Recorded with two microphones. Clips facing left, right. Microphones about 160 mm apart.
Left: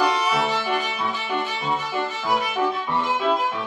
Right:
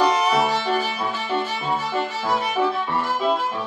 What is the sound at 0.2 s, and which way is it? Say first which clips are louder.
Music: right 3 dB; 40° right (ahead or behind).